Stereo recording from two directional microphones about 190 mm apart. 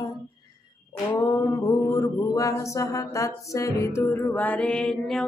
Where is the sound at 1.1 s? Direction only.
15° left (ahead or behind).